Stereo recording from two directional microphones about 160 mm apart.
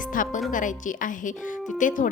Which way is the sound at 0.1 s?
55° left (ahead or behind).